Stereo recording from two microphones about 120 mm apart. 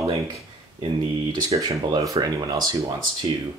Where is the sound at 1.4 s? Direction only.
30° right (ahead or behind).